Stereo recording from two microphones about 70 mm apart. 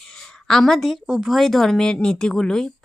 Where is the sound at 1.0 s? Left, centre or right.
Centre.